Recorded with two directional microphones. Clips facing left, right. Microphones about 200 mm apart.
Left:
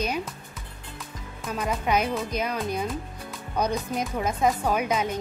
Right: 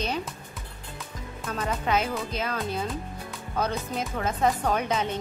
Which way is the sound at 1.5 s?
15° left (ahead or behind).